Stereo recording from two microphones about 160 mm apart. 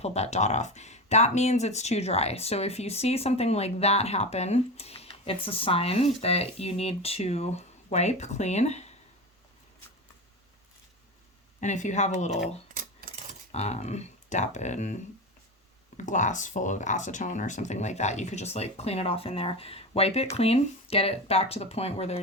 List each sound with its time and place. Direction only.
0.0 s speech: 40° left (ahead or behind)
11.6 s speech: 50° left (ahead or behind)
12.7 s a sound: 60° right (ahead or behind)
13.5 s speech: 40° left (ahead or behind)
16.0 s speech: 50° left (ahead or behind)